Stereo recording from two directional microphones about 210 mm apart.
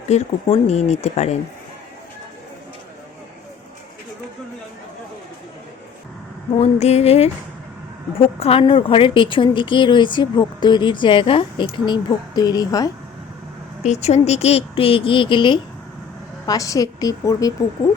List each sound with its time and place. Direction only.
0.1 s speech: 30° left (ahead or behind)
6.6 s speech: 30° left (ahead or behind)
13.8 s a woman's voice: 30° left (ahead or behind); by 17.5 s 15° left (ahead or behind)